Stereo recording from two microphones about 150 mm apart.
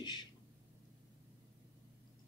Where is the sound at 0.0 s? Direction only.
30° left (ahead or behind).